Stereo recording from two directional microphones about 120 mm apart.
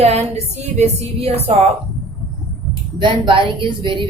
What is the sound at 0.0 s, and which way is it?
A woman's voice, 60° right (ahead or behind).